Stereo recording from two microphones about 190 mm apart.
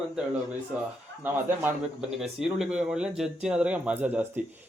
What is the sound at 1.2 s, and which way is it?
A man's voice, 10° right (ahead or behind).